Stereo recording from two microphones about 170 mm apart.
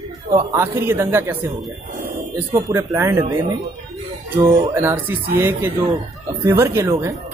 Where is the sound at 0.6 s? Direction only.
15° right (ahead or behind).